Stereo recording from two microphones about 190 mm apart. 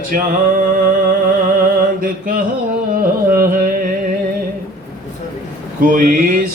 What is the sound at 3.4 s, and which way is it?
Music, 45° right (ahead or behind).